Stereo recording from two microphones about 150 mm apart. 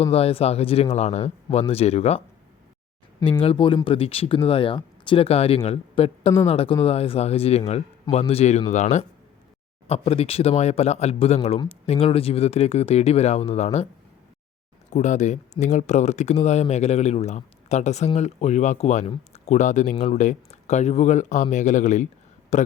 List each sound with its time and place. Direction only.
0.0 s speech: 40° left (ahead or behind)
3.2 s speech: 35° left (ahead or behind)
14.8 s speech: 50° left (ahead or behind)